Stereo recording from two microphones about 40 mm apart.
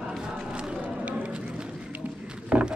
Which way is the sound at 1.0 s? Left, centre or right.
Right.